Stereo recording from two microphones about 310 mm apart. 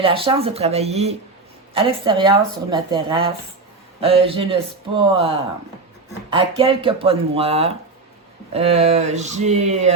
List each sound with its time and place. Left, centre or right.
0.0 s speech: centre